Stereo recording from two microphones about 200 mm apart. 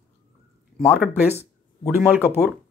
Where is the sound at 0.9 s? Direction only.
10° right (ahead or behind).